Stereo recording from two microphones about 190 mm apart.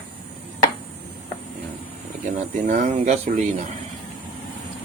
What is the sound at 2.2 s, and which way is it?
Speech, 40° right (ahead or behind).